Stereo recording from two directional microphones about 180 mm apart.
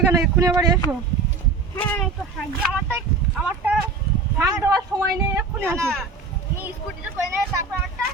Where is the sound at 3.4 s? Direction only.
5° right (ahead or behind).